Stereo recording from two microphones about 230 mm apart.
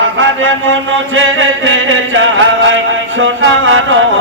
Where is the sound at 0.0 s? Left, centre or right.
Right.